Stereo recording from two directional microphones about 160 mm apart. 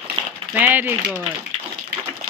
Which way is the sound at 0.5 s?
10° right (ahead or behind).